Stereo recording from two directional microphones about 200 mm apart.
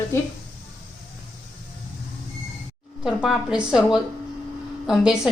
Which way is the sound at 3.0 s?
Centre (ahead or behind).